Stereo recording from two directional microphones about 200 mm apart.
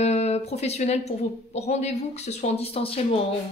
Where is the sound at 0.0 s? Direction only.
35° left (ahead or behind).